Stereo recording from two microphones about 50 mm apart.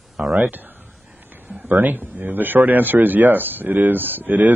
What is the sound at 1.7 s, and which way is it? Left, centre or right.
Speech, right.